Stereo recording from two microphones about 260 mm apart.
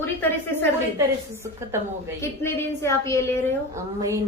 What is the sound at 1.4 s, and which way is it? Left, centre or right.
Speech, centre.